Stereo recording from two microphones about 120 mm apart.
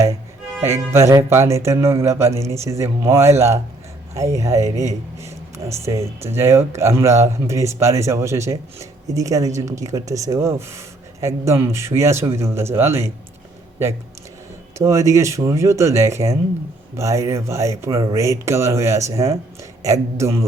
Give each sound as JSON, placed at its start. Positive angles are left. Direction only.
{"t": 0.6, "sound": "speech", "side_deg": -25}
{"t": 5.1, "sound": "a sound", "side_deg": -25}
{"t": 5.8, "sound": "speech", "side_deg": -25}
{"t": 14.8, "sound": "speech", "side_deg": -25}